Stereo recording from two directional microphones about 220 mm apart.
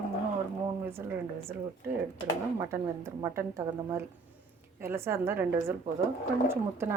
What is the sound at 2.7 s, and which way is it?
Speech, 10° right (ahead or behind).